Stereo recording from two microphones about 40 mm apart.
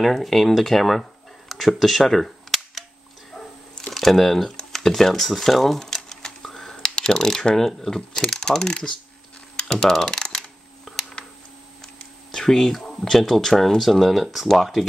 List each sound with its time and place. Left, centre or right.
0.0 s speech: centre
1.5 s cap gun: centre
3.9 s speech: centre
5.9 s a sound: centre
8.2 s speech: centre
9.6 s computer keyboard: centre
10.0 s typing: centre
10.9 s a sound: centre
11.8 s computer keyboard: centre
13.2 s speech: centre